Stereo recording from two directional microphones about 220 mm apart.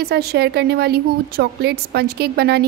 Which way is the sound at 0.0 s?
45° right (ahead or behind).